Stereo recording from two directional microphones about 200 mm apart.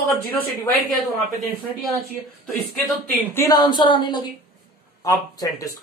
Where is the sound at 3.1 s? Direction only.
15° left (ahead or behind).